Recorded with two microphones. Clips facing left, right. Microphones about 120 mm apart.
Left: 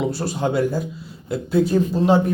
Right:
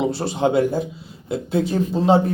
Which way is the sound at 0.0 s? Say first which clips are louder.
Right 2 dB; 25° right (ahead or behind).